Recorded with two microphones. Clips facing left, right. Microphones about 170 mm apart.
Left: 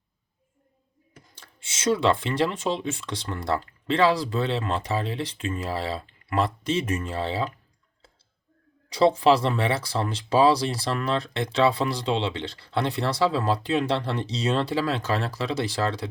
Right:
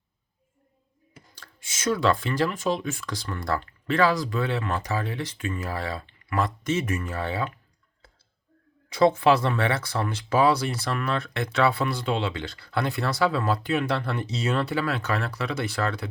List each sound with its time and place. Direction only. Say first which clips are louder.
1.4 s speech: even; 25° left (ahead or behind)
9.0 s speech: left 1 dB; 30° left (ahead or behind)